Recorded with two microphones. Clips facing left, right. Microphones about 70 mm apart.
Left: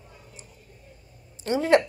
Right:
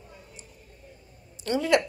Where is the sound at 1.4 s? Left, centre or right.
Left.